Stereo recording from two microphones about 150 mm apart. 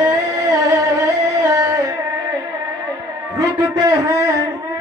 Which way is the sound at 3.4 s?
20° right (ahead or behind).